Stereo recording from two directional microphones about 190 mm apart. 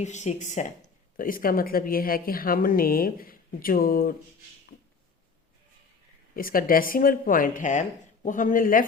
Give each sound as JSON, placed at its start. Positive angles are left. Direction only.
{"t": 0.0, "sound": "speech", "side_deg": 40}
{"t": 6.3, "sound": "speech", "side_deg": 50}